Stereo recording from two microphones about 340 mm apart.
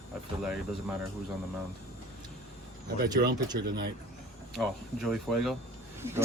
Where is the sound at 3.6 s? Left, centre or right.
Right.